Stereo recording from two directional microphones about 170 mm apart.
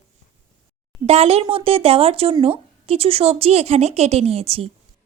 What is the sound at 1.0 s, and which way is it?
A woman's voice, 35° right (ahead or behind).